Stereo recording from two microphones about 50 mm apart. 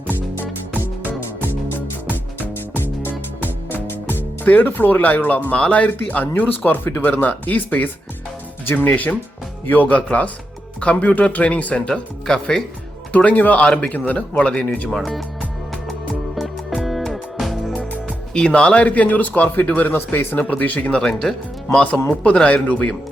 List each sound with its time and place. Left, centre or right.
0.1 s music: right
3.7 s music: left
5.5 s speech: left
12.2 s speech: centre
13.1 s speech: left
13.7 s speech: left
14.8 s speech: centre
16.3 s music: centre
18.3 s speech: left
21.2 s speech: centre